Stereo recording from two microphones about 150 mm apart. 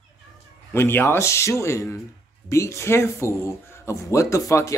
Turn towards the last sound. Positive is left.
turn(degrees=20)  # may be behind; listen again after turning